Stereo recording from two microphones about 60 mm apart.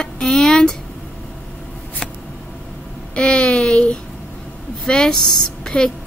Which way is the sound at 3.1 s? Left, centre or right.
Centre.